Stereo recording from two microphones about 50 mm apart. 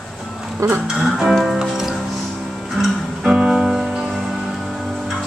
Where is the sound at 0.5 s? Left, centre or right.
Right.